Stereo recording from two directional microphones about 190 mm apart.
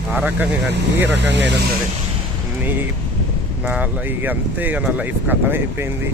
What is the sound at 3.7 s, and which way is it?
Speech, 10° right (ahead or behind).